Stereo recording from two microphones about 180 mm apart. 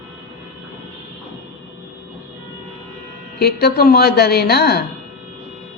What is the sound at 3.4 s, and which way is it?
A woman's voice, 65° left (ahead or behind).